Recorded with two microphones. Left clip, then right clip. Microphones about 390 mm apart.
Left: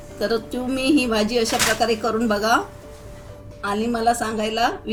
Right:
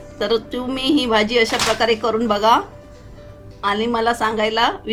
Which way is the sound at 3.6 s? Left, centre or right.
Centre.